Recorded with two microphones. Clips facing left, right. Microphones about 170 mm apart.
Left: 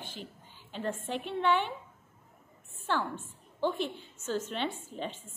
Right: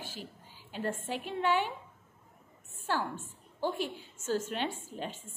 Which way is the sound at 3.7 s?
10° right (ahead or behind).